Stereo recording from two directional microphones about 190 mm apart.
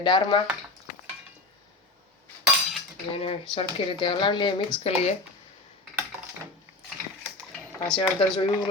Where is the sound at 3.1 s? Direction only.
30° left (ahead or behind).